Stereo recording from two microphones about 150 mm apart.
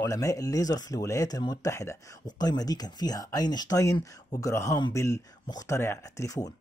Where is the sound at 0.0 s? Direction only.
20° left (ahead or behind).